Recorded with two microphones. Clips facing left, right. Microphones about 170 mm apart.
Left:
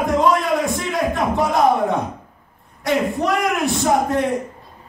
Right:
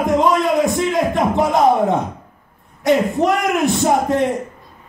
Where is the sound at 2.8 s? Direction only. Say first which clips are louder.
Right 4 dB; 20° right (ahead or behind).